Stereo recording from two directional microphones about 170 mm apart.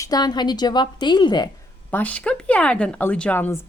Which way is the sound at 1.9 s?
10° left (ahead or behind).